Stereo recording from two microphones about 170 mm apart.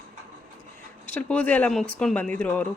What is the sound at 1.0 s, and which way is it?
Speech, 10° left (ahead or behind).